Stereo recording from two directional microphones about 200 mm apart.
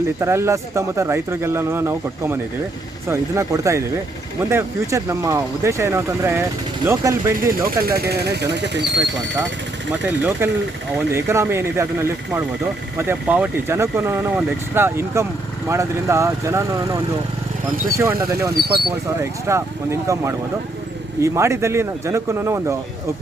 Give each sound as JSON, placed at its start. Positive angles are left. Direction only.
{"t": 0.2, "sound": "speech", "side_deg": -15}
{"t": 7.9, "sound": "speech", "side_deg": -50}
{"t": 10.1, "sound": "speech", "side_deg": -10}
{"t": 18.5, "sound": "speech", "side_deg": -55}
{"t": 19.2, "sound": "speech", "side_deg": -15}